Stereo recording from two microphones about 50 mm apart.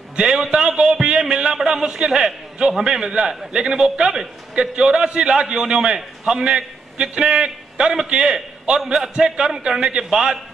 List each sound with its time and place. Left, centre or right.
0.1 s a man's voice: centre